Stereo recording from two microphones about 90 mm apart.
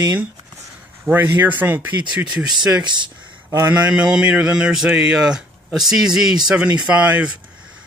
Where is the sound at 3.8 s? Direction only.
10° right (ahead or behind).